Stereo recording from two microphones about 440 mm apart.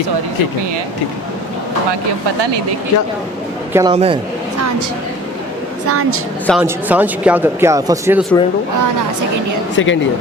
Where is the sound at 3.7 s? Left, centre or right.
Centre.